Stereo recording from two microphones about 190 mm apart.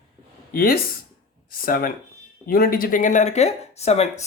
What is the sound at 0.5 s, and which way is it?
Speech, 50° left (ahead or behind).